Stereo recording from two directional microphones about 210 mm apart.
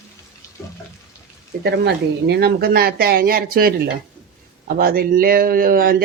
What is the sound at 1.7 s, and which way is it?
A man's voice, 50° right (ahead or behind).